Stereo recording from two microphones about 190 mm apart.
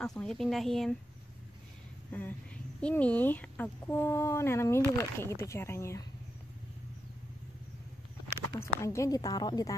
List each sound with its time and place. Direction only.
0.0 s speech: centre (ahead or behind)
2.1 s speech: 10° left (ahead or behind)
8.5 s a woman's voice: 15° left (ahead or behind)